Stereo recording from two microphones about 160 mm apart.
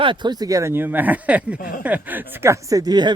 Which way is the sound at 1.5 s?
60° left (ahead or behind).